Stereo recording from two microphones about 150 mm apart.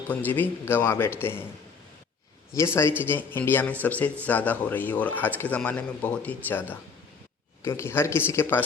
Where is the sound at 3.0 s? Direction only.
15° left (ahead or behind).